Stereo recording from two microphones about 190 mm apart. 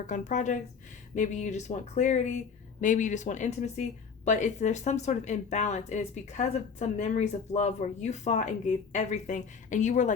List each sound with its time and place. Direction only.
0.1 s speech: 40° left (ahead or behind)